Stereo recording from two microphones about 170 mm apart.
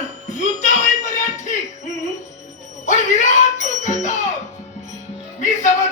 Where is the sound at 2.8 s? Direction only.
45° left (ahead or behind).